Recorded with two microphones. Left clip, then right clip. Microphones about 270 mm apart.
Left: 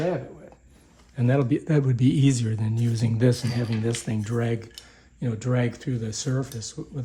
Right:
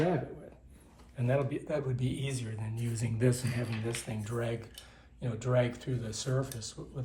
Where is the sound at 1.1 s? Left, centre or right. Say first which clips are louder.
Left 8 dB; left.